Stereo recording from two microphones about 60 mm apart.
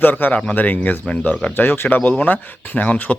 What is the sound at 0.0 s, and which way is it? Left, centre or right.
Speech, left.